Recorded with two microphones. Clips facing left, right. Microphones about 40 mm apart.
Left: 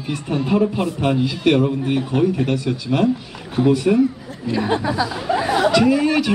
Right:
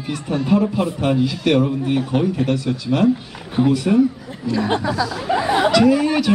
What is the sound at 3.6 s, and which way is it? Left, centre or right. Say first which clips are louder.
Speech: left 1 dB; centre.